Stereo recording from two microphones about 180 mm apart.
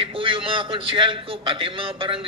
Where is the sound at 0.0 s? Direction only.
30° right (ahead or behind).